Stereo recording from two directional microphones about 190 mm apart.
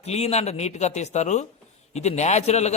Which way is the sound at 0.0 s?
35° left (ahead or behind).